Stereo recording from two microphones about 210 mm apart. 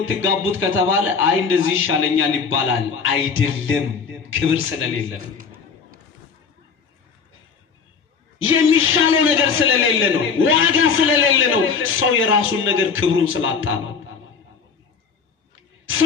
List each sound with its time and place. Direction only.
0.0 s a man's voice: 70° left (ahead or behind)
8.4 s a man's voice: 70° left (ahead or behind)